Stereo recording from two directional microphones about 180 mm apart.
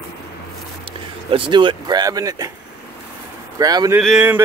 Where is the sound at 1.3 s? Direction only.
30° right (ahead or behind).